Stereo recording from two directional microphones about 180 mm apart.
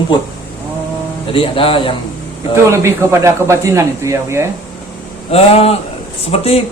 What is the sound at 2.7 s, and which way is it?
Speech, 15° right (ahead or behind).